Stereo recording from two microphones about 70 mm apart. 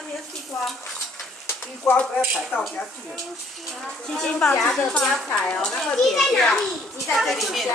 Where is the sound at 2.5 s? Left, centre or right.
Left.